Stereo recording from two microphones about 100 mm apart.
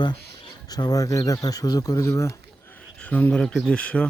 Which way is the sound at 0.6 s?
40° left (ahead or behind).